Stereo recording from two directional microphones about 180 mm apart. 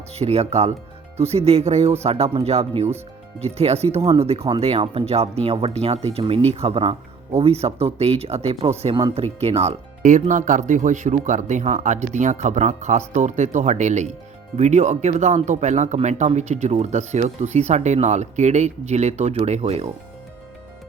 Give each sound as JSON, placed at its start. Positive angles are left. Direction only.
{"t": 0.1, "sound": "speech", "side_deg": -35}